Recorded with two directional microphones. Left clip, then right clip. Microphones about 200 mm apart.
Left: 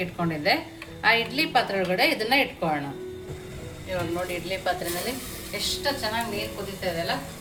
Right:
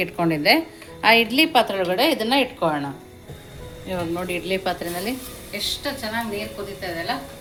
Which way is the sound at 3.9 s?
35° right (ahead or behind).